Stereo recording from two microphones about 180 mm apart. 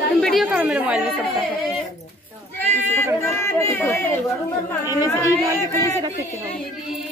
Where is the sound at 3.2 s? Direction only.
15° left (ahead or behind).